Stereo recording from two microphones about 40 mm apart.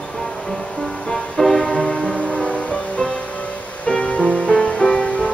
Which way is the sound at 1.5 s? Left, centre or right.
Centre.